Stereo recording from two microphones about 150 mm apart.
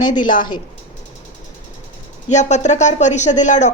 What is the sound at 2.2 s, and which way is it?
A woman's voice, 50° left (ahead or behind).